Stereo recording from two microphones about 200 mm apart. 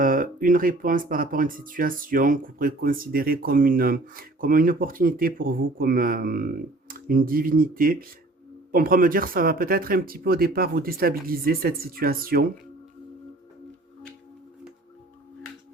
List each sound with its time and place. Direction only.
0.0 s speech: 45° right (ahead or behind)